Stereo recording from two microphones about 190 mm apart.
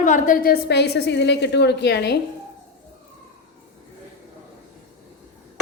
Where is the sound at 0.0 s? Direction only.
45° left (ahead or behind); by 2.1 s 60° left (ahead or behind).